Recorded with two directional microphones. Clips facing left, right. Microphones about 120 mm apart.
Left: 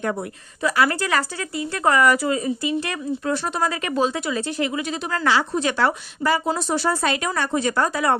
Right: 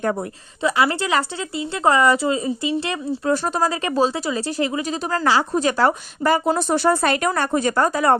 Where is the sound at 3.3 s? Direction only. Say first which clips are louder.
Right 3 dB; 40° right (ahead or behind).